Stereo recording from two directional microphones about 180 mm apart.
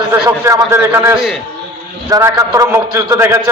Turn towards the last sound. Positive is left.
turn(degrees=-15)  # may be behind; listen again after turning